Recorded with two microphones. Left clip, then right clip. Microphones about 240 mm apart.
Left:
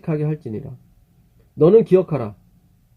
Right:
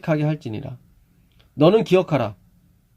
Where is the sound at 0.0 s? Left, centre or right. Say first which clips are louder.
Right 2 dB; right.